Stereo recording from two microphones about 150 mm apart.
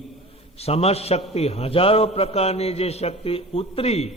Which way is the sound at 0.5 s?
45° left (ahead or behind).